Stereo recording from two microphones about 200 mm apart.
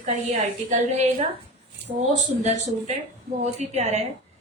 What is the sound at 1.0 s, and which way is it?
A woman's voice, 35° right (ahead or behind).